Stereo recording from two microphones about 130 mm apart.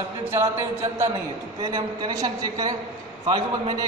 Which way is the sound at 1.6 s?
30° right (ahead or behind).